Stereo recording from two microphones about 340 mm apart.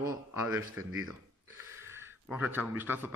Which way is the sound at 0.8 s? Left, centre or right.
Right.